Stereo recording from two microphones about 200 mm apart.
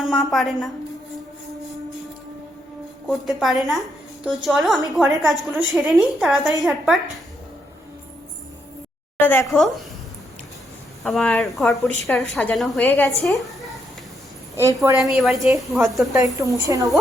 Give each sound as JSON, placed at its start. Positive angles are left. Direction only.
{"t": 0.0, "sound": "a woman's voice", "side_deg": 0}
{"t": 3.1, "sound": "a woman's voice", "side_deg": 0}
{"t": 9.2, "sound": "a woman's voice", "side_deg": 10}
{"t": 11.0, "sound": "a woman's voice", "side_deg": 0}
{"t": 14.5, "sound": "a woman's voice", "side_deg": -15}
{"t": 15.1, "sound": "a woman's voice", "side_deg": 0}
{"t": 16.1, "sound": "a woman's voice", "side_deg": -15}